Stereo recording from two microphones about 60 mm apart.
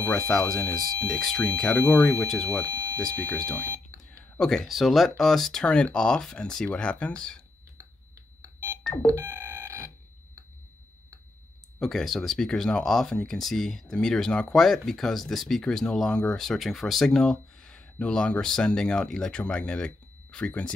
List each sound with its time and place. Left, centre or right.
0.6 s speech: centre
2.6 s smoke detector: right
3.0 s speech: centre
3.6 s smoke detector: right
4.4 s speech: centre
5.7 s speech: centre
9.0 s synthesizer: right
11.8 s speech: centre